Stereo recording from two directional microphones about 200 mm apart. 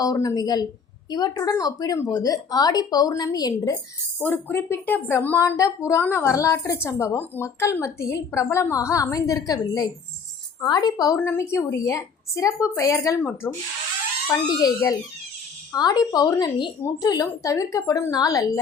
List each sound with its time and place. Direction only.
0.0 s speech: 20° left (ahead or behind)
4.2 s a woman's voice: 10° left (ahead or behind)